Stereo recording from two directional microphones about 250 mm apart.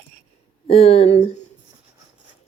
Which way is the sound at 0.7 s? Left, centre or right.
Left.